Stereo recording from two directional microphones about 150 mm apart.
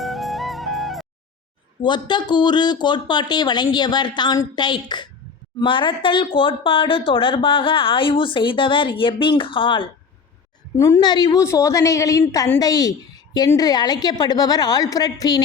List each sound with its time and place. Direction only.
0.0 s music: centre (ahead or behind)
1.8 s speech: 30° left (ahead or behind)
10.8 s speech: 20° left (ahead or behind)